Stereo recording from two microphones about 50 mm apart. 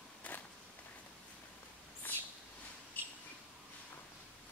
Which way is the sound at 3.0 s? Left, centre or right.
Left.